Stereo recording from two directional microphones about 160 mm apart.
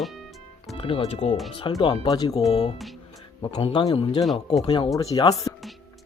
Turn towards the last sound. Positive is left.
turn(degrees=20)  # may be behind; listen again after turning